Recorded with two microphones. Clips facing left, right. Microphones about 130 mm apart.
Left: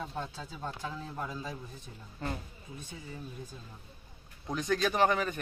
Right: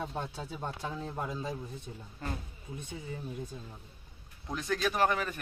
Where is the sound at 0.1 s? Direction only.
25° right (ahead or behind).